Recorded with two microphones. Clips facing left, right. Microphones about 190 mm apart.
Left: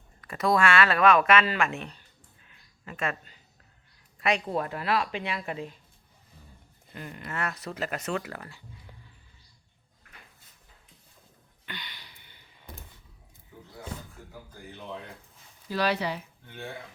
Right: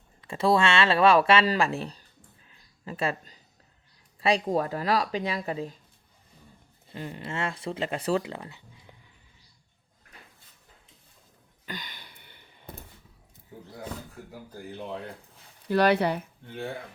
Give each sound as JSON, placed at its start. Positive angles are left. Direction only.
{"t": 0.2, "sound": "speech", "side_deg": -25}
{"t": 6.9, "sound": "speech", "side_deg": -30}
{"t": 11.6, "sound": "a sound", "side_deg": -45}
{"t": 14.5, "sound": "speech", "side_deg": -35}
{"t": 15.7, "sound": "speech", "side_deg": -55}